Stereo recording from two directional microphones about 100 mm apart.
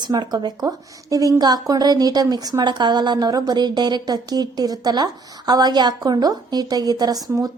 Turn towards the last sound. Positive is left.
turn(degrees=-40)  # may be behind; listen again after turning